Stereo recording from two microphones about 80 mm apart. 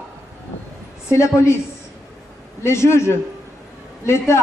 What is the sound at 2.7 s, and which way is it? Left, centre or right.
A man's voice, left.